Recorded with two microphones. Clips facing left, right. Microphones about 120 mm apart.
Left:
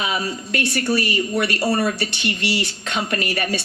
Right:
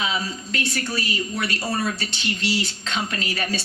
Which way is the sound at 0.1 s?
60° left (ahead or behind).